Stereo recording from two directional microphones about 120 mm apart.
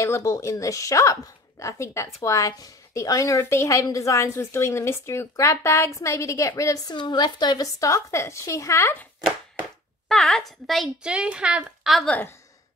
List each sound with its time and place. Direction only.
0.0 s a woman's voice: 25° left (ahead or behind)
10.0 s speech: 5° left (ahead or behind)